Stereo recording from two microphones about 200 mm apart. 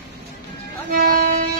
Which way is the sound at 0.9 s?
45° right (ahead or behind).